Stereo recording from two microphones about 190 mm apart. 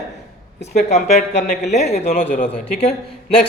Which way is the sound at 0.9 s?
35° left (ahead or behind).